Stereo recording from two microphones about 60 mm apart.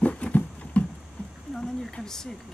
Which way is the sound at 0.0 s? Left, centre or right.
Left.